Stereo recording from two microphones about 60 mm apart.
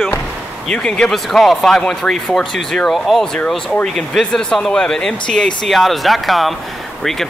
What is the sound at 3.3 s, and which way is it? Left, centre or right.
Speech, centre.